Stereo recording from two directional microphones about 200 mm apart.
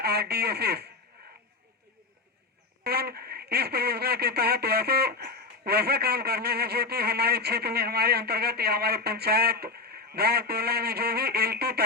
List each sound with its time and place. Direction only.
0.0 s speech: 55° right (ahead or behind)
2.8 s speech: 50° right (ahead or behind)